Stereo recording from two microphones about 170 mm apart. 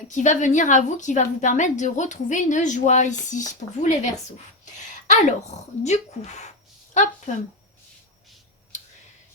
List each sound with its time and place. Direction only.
0.1 s a woman's voice: 45° left (ahead or behind)